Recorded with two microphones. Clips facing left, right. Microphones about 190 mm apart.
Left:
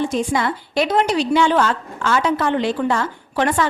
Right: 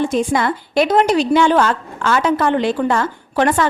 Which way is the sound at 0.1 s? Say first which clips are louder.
Right 3 dB; 50° right (ahead or behind).